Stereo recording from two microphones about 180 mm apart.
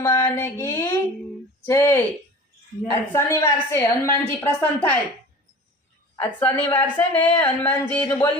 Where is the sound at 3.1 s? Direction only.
15° left (ahead or behind).